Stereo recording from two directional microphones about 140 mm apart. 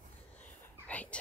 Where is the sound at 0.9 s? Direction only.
10° left (ahead or behind).